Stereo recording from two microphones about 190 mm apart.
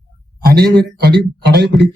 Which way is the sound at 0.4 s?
55° right (ahead or behind).